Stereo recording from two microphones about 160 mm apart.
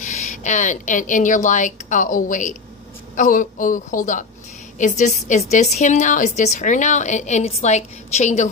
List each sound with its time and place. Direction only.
0.0 s a woman's voice: 50° left (ahead or behind)